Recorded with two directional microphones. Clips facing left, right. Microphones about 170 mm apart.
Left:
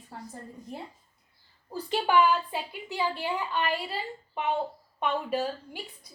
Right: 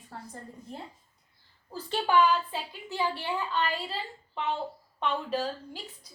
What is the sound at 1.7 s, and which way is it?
A woman's voice, 15° left (ahead or behind).